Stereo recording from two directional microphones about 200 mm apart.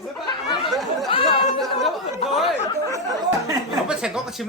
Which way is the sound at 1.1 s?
25° left (ahead or behind).